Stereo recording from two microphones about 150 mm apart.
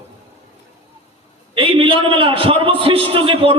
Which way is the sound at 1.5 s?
35° right (ahead or behind).